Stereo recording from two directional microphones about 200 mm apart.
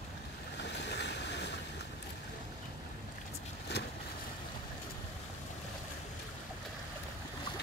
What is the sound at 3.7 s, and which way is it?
Vehicle, 55° left (ahead or behind).